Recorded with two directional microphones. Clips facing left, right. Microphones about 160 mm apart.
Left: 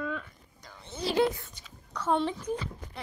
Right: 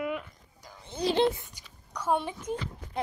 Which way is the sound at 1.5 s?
10° right (ahead or behind).